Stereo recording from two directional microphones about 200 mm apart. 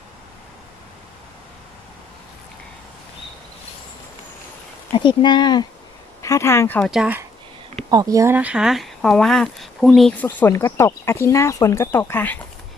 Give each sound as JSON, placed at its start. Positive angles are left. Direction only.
{"t": 5.0, "sound": "speech", "side_deg": 20}
{"t": 7.9, "sound": "speech", "side_deg": -20}